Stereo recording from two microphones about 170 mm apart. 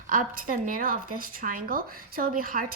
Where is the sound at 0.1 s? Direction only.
55° right (ahead or behind).